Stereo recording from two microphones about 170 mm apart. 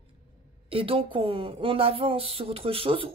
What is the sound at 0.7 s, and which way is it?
Speech, 35° right (ahead or behind).